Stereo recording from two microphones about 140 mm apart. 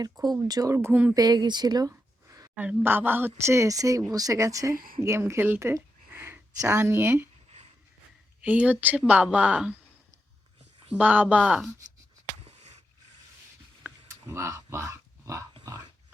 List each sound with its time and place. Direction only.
0.0 s speech: 30° right (ahead or behind)
1.1 s a woman's voice: 30° right (ahead or behind)
2.6 s a woman's voice: 10° right (ahead or behind)
4.7 s speech: 90° right
5.0 s a woman's voice: 20° right (ahead or behind)
8.4 s a woman's voice: 10° right (ahead or behind)
10.9 s a woman's voice: 10° right (ahead or behind)
14.1 s a sound: 20° right (ahead or behind)
15.5 s dog: 25° right (ahead or behind)